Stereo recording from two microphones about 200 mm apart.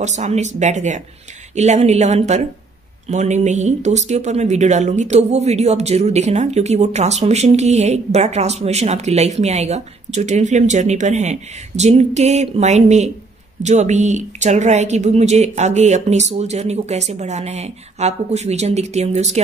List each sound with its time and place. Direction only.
0.0 s speech: 35° right (ahead or behind)